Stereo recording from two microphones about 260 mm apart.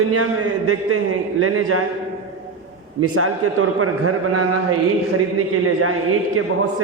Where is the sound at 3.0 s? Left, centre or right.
Right.